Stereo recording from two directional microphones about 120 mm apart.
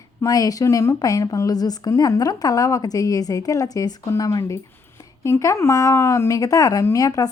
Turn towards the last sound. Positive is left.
turn(degrees=30)  # may be behind; listen again after turning